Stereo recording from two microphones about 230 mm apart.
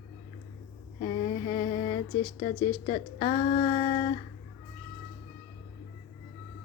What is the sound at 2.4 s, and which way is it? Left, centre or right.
Speech, left.